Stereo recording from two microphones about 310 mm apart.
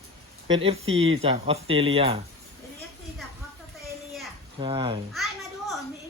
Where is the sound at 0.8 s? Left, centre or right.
Right.